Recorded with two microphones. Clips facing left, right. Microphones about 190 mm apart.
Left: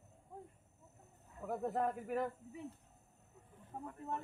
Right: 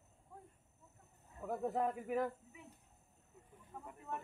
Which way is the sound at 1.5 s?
Centre (ahead or behind).